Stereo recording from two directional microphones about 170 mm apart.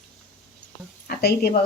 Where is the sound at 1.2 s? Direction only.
65° left (ahead or behind).